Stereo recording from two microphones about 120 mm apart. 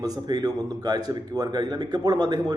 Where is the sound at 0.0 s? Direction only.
30° right (ahead or behind).